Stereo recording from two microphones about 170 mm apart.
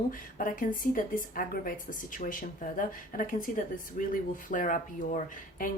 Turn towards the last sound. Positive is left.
turn(degrees=50)  # may be behind; listen again after turning